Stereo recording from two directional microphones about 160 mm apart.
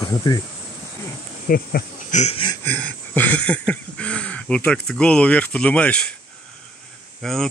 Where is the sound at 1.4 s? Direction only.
65° left (ahead or behind).